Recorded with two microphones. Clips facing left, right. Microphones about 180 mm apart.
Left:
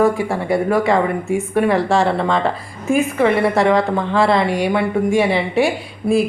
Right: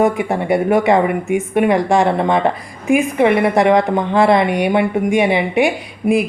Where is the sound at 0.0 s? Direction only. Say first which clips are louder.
Right 1 dB; 20° right (ahead or behind).